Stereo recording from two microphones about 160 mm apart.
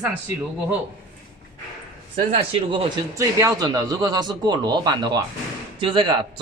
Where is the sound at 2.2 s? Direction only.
35° right (ahead or behind).